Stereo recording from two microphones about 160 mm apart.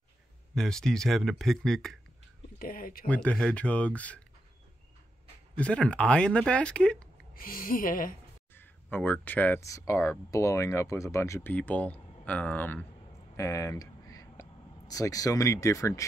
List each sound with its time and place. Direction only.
0.6 s speech: 5° left (ahead or behind)
2.6 s speech: 65° left (ahead or behind)
3.1 s speech: 5° left (ahead or behind)
5.6 s speech: 5° left (ahead or behind)
7.3 s speech: 60° left (ahead or behind)
8.5 s speech: 10° left (ahead or behind)
13.4 s a sound: 20° left (ahead or behind)
14.9 s speech: 20° left (ahead or behind)